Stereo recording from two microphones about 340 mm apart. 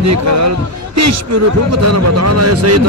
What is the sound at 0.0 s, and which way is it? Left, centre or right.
Speech, right.